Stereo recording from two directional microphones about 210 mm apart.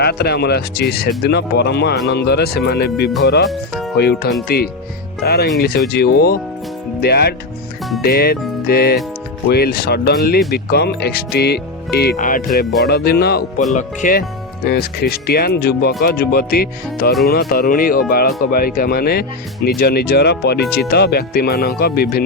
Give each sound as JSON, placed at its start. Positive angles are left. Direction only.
{"t": 0.0, "sound": "speech", "side_deg": 50}
{"t": 3.5, "sound": "speech", "side_deg": 0}
{"t": 3.9, "sound": "speech", "side_deg": 50}